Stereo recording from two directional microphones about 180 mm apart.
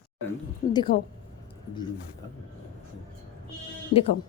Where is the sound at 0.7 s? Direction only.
25° left (ahead or behind).